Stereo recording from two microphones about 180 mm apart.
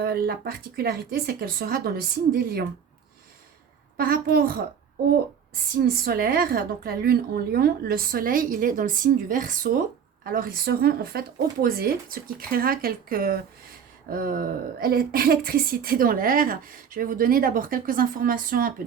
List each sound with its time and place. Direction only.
0.0 s a woman's voice: 60° right (ahead or behind)
3.9 s a woman's voice: 55° right (ahead or behind)
5.7 s a woman's voice: 55° right (ahead or behind)